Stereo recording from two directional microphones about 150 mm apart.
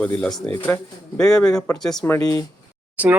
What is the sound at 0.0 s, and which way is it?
A man's voice, 5° left (ahead or behind).